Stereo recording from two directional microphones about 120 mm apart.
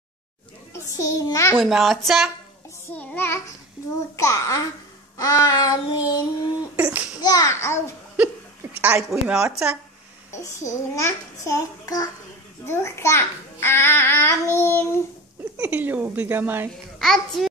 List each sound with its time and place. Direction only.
0.7 s a child's voice: 25° left (ahead or behind)
1.5 s speech: centre (ahead or behind)
2.9 s child singing: 15° left (ahead or behind)
4.2 s a child's voice: 25° left (ahead or behind)
6.8 s a woman's voice: 15° right (ahead or behind)
7.2 s a child's voice: 30° left (ahead or behind)
8.8 s speech: 5° right (ahead or behind)
10.3 s a child's voice: 25° left (ahead or behind)
15.5 s a woman's voice: 15° right (ahead or behind)
17.0 s speech: centre (ahead or behind)